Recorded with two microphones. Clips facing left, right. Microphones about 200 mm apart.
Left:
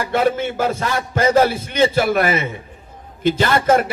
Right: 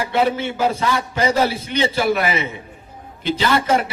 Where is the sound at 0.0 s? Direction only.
50° left (ahead or behind).